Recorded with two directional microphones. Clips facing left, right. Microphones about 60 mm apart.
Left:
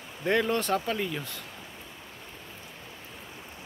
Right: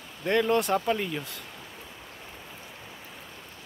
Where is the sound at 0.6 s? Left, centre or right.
Centre.